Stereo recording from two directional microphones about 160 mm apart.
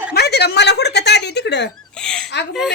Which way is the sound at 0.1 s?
90° left.